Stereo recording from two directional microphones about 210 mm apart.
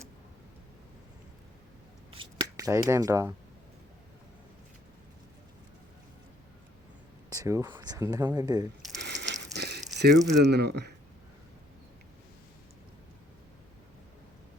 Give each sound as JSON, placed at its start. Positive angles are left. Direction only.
{"t": 2.0, "sound": "speech", "side_deg": -20}
{"t": 7.3, "sound": "speech", "side_deg": -15}
{"t": 9.0, "sound": "a sound", "side_deg": -55}
{"t": 9.6, "sound": "speech", "side_deg": -50}